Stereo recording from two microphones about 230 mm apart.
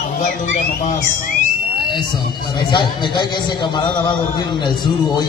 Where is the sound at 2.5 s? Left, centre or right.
Centre.